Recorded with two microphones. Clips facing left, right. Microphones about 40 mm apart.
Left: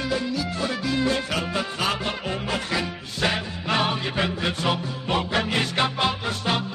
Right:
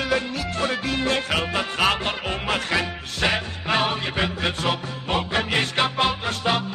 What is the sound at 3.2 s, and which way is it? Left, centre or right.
Music, centre.